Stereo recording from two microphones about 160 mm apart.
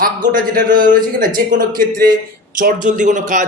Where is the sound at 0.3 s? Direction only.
60° right (ahead or behind).